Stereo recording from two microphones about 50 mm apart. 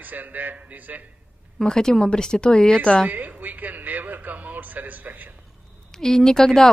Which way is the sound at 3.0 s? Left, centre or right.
Right.